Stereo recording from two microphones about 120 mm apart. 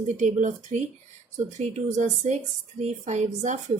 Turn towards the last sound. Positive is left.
turn(degrees=-80)